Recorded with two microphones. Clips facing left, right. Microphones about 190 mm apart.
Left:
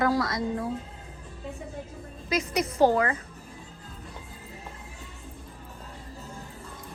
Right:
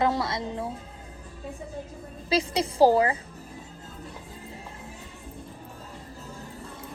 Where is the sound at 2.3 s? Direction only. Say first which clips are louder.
Right 2 dB; 30° right (ahead or behind).